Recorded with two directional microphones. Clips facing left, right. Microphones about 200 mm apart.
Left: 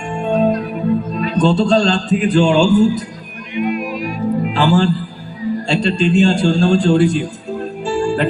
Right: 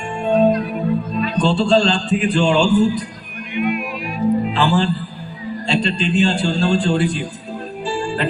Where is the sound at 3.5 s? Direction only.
40° left (ahead or behind).